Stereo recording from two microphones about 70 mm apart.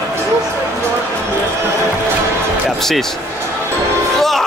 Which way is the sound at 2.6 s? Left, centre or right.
Centre.